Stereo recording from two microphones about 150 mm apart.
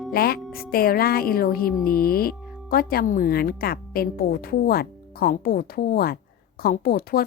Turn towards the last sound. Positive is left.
turn(degrees=90)